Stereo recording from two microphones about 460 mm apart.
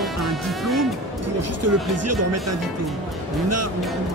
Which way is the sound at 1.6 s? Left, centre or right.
Right.